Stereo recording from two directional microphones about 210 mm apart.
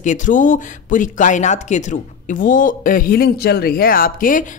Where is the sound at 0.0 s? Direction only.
35° left (ahead or behind).